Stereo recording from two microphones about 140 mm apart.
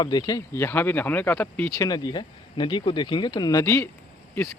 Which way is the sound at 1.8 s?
30° left (ahead or behind).